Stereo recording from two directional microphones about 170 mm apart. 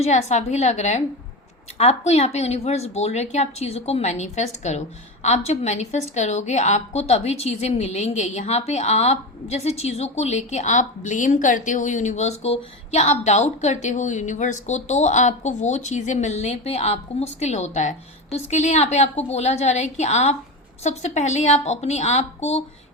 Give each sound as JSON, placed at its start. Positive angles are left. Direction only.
{"t": 0.0, "sound": "a woman's voice", "side_deg": 40}